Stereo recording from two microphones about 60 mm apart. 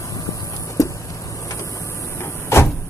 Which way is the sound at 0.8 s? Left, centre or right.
Left.